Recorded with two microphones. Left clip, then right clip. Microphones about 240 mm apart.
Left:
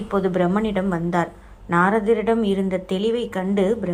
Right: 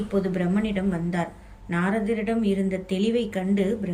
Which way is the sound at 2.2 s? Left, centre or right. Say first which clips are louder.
Left 5 dB; centre.